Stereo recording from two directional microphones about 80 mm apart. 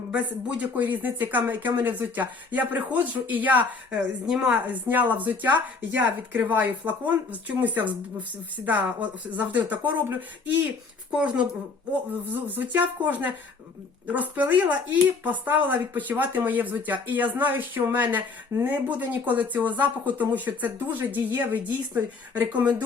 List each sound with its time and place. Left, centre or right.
0.1 s speech: centre